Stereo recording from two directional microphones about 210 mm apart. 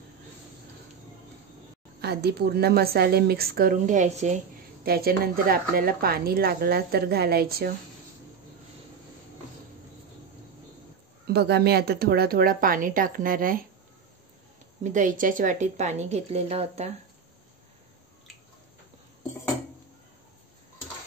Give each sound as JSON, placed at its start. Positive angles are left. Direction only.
{"t": 2.0, "sound": "speech", "side_deg": -50}
{"t": 4.8, "sound": "speech", "side_deg": -45}
{"t": 11.2, "sound": "speech", "side_deg": -50}
{"t": 14.8, "sound": "a woman's voice", "side_deg": -35}